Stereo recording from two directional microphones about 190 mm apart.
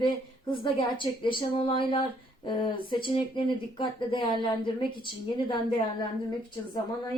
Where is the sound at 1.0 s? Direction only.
25° left (ahead or behind).